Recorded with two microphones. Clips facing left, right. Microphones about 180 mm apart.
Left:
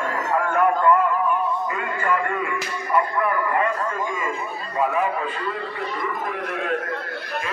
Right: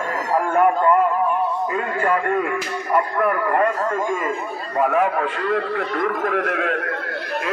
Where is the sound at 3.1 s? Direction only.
50° right (ahead or behind).